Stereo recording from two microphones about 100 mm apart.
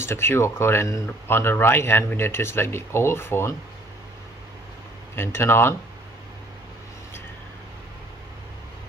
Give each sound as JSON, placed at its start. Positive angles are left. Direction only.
{"t": 0.0, "sound": "speech", "side_deg": 25}
{"t": 5.1, "sound": "speech", "side_deg": 25}